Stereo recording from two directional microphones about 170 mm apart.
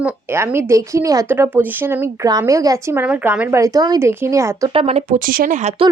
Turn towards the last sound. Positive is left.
turn(degrees=-50)  # may be behind; listen again after turning